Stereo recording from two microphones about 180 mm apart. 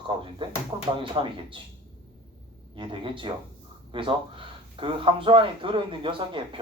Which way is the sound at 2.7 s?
30° right (ahead or behind).